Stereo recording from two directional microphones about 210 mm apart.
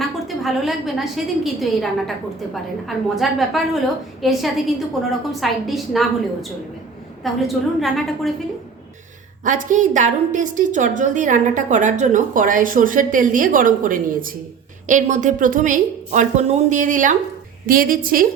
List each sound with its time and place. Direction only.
0.0 s a woman's voice: centre (ahead or behind)
7.4 s a woman's voice: centre (ahead or behind)
9.4 s a woman's voice: 40° right (ahead or behind)